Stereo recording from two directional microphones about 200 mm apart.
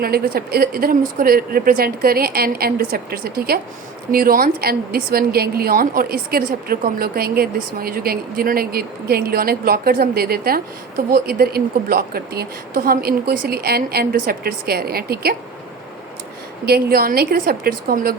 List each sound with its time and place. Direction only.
0.0 s a woman's voice: 50° right (ahead or behind)
16.6 s a woman's voice: 50° right (ahead or behind)